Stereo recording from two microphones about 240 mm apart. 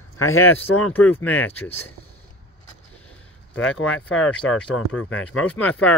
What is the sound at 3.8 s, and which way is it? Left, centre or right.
Speech, centre.